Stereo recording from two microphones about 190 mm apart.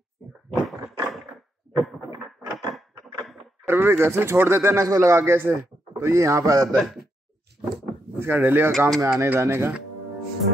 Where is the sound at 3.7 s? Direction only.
10° right (ahead or behind).